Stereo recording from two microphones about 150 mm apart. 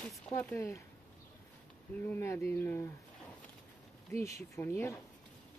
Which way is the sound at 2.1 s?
15° left (ahead or behind).